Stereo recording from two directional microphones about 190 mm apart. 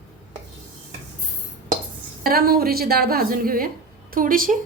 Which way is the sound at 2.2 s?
50° right (ahead or behind).